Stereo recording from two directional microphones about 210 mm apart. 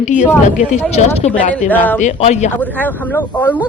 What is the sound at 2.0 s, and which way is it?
Speech, 35° left (ahead or behind).